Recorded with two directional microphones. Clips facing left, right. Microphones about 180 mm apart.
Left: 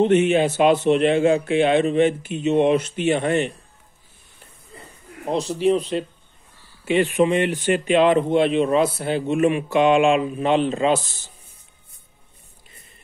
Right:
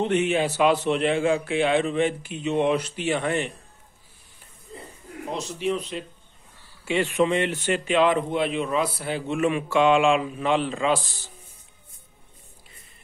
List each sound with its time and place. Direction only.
0.0 s speech: 20° left (ahead or behind)
5.3 s speech: 35° left (ahead or behind)
6.8 s speech: 20° left (ahead or behind)